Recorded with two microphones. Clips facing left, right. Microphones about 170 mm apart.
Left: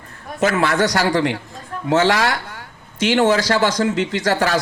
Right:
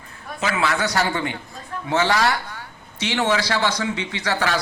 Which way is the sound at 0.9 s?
75° left (ahead or behind).